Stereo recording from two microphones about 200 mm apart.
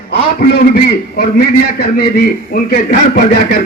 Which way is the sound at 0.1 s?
50° left (ahead or behind).